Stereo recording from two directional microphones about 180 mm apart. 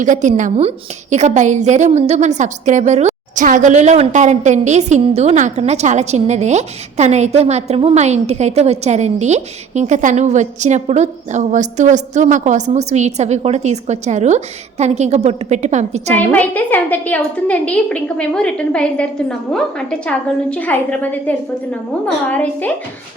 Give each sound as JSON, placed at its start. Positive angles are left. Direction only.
{"t": 0.0, "sound": "a woman's voice", "side_deg": -45}
{"t": 16.3, "sound": "a woman's voice", "side_deg": 10}